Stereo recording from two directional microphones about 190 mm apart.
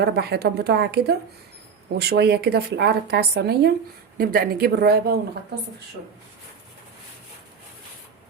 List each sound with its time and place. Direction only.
0.0 s a woman's voice: 60° right (ahead or behind)